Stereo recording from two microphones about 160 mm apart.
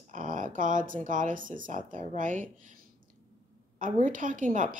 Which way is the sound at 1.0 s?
55° right (ahead or behind).